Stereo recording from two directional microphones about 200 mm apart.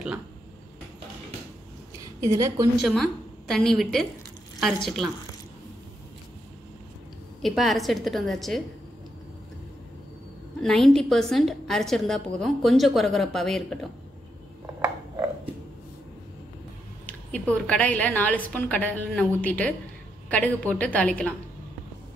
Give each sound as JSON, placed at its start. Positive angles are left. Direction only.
{"t": 2.1, "sound": "a woman's voice", "side_deg": -15}
{"t": 2.8, "sound": "a woman's voice", "side_deg": 0}
{"t": 7.4, "sound": "a woman's voice", "side_deg": 0}
{"t": 10.6, "sound": "a woman's voice", "side_deg": 0}
{"t": 17.0, "sound": "a woman's voice", "side_deg": 5}